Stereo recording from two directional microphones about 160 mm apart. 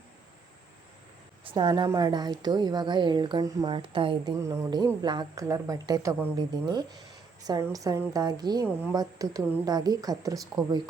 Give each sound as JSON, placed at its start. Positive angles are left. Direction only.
{"t": 1.5, "sound": "a woman's voice", "side_deg": -30}
{"t": 8.6, "sound": "a woman's voice", "side_deg": -15}